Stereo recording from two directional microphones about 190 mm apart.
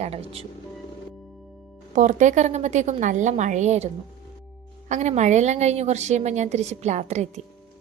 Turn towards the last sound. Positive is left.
turn(degrees=-40)  # may be behind; listen again after turning